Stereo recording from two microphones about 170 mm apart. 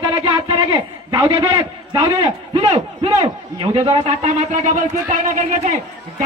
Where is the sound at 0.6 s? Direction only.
20° right (ahead or behind).